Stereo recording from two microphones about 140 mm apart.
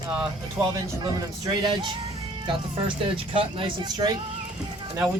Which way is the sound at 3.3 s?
35° right (ahead or behind).